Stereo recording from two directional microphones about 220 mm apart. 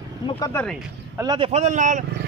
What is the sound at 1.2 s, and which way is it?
Speech, 20° right (ahead or behind).